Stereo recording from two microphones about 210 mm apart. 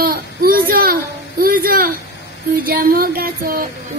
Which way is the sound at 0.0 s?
45° right (ahead or behind).